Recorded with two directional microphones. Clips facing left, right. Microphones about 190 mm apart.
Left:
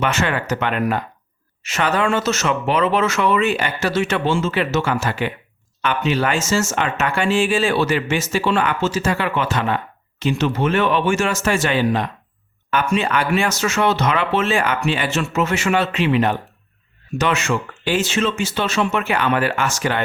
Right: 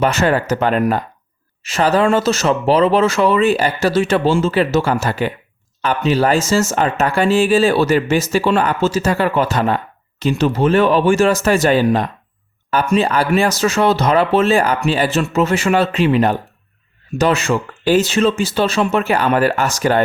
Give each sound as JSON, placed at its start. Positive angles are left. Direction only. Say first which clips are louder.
{"t": 0.0, "sound": "speech", "louder": "right 5 dB", "side_deg": -35}